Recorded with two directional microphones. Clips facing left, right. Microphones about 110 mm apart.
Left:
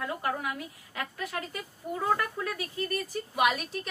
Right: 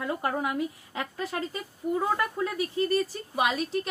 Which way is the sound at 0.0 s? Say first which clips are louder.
Right 3 dB; 25° right (ahead or behind).